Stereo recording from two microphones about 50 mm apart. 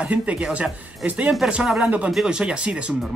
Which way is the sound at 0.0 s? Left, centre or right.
Right.